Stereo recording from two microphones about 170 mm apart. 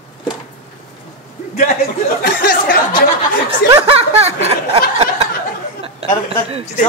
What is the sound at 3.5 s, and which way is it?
Snicker, 35° right (ahead or behind).